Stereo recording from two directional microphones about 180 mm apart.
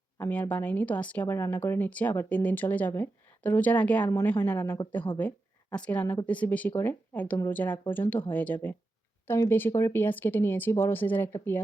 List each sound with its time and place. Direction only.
0.2 s speech: 10° left (ahead or behind)